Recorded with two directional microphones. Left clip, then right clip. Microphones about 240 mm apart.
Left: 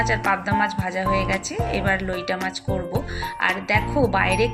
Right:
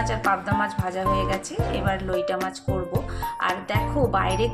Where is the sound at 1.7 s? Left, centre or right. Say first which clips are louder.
Left 1 dB; right.